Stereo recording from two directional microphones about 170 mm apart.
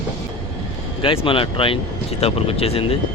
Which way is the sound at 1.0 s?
30° left (ahead or behind).